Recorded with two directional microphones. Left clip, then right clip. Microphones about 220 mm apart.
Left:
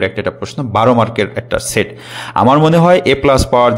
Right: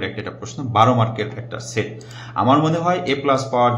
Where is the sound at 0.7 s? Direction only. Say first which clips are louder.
Left 5 dB; 40° left (ahead or behind).